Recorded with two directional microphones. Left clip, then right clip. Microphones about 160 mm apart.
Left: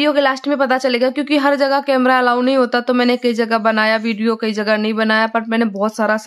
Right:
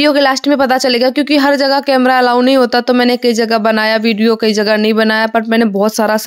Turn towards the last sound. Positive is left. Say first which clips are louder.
# right 5 dB
turn(degrees=-35)  # may be behind; listen again after turning